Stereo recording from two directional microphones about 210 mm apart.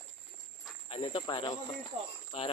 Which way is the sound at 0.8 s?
25° left (ahead or behind).